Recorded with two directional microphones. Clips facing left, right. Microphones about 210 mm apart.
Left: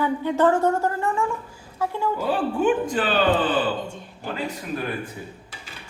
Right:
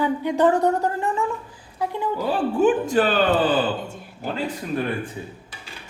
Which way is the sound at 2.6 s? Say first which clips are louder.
Right 4 dB; 40° right (ahead or behind).